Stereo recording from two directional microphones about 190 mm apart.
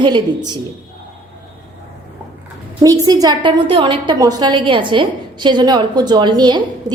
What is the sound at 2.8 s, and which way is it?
A woman's voice, 20° right (ahead or behind).